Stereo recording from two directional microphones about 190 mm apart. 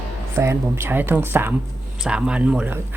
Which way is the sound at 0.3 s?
10° right (ahead or behind).